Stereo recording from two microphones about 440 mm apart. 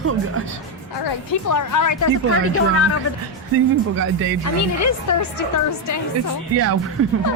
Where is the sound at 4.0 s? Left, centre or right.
Right.